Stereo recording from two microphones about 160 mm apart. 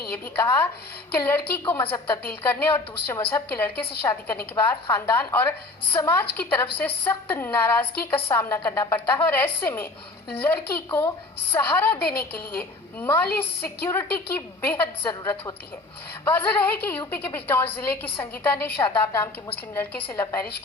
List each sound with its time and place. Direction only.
0.1 s a woman's voice: 10° left (ahead or behind)